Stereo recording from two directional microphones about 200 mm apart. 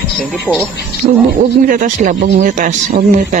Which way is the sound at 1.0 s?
40° right (ahead or behind).